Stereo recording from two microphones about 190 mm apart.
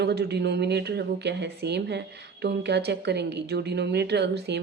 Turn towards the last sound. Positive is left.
turn(degrees=-65)  # may be behind; listen again after turning